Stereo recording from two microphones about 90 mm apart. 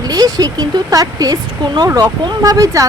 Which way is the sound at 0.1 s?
45° right (ahead or behind).